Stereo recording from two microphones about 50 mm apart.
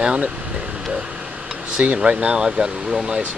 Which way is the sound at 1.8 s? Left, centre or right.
Right.